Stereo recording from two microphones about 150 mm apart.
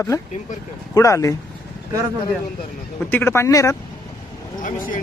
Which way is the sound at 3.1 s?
15° left (ahead or behind).